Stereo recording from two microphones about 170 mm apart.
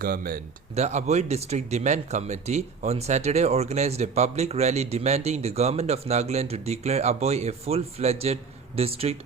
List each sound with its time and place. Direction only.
0.0 s speech: 60° right (ahead or behind)
0.8 s speech: 40° right (ahead or behind)